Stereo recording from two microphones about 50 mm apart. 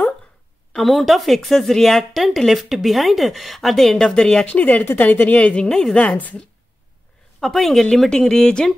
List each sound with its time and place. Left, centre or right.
0.7 s a woman's voice: centre
4.6 s a woman's voice: left
5.4 s speech: left
5.9 s speech: left
7.3 s a woman's voice: centre